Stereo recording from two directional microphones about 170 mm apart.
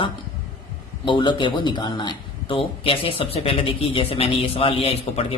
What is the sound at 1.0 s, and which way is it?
Speech, 25° left (ahead or behind).